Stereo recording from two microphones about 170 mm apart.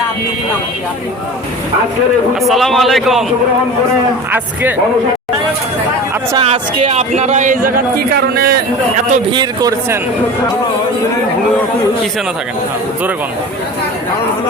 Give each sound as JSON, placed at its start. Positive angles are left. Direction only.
{"t": 2.4, "sound": "a man's voice", "side_deg": 0}
{"t": 6.3, "sound": "speech", "side_deg": -35}
{"t": 9.3, "sound": "a man's voice", "side_deg": -25}